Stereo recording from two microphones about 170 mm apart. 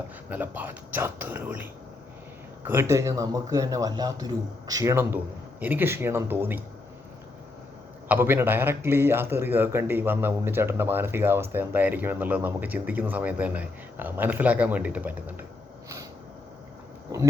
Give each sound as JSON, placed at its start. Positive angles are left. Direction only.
{"t": 0.3, "sound": "a man's voice", "side_deg": -10}
{"t": 2.6, "sound": "a man's voice", "side_deg": -15}
{"t": 8.0, "sound": "a man's voice", "side_deg": -10}